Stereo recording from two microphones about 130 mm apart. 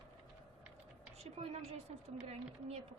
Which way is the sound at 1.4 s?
50° right (ahead or behind).